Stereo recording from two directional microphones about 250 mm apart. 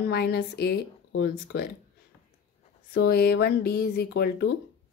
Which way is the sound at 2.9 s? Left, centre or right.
Left.